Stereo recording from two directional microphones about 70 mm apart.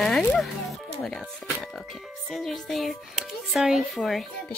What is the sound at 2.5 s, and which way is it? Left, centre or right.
Speech, centre.